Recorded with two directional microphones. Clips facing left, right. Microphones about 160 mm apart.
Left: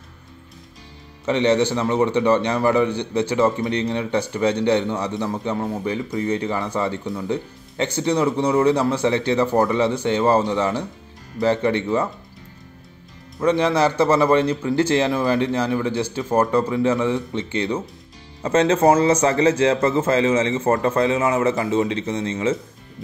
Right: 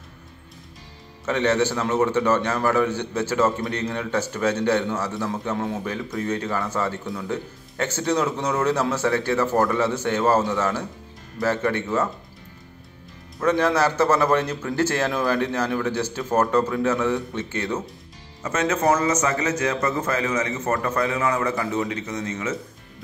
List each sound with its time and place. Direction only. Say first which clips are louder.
1.2 s a man's voice: left 3 dB; 15° left (ahead or behind)
13.4 s a man's voice: left 2 dB; 10° left (ahead or behind)
18.4 s a man's voice: left 6 dB; 30° left (ahead or behind)